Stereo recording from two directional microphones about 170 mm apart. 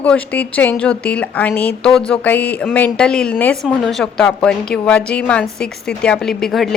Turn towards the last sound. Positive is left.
turn(degrees=0)  # may be behind; listen again after turning